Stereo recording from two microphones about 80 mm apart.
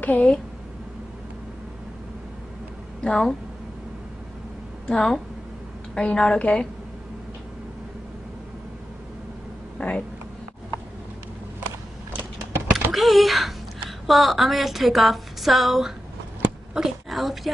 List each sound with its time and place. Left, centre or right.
0.0 s a woman's voice: centre
3.0 s speech: centre
4.8 s a woman's voice: centre
9.8 s a sound: centre
12.1 s vehicle: right
12.9 s a sound: centre
16.7 s speech: centre